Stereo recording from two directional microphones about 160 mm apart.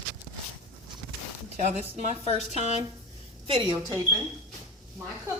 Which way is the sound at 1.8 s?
45° right (ahead or behind).